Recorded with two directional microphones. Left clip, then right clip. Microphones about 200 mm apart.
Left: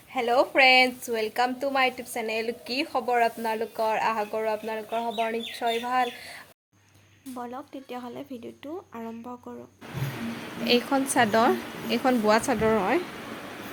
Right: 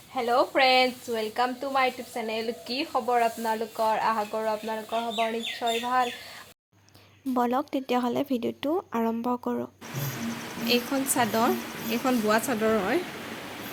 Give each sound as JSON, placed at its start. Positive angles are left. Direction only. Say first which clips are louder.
{"t": 0.1, "sound": "a woman's voice", "louder": "left 1 dB", "side_deg": 20}
{"t": 7.3, "sound": "a woman's voice", "louder": "right 11 dB", "side_deg": -50}
{"t": 10.7, "sound": "a woman's voice", "louder": "left 3 dB", "side_deg": 30}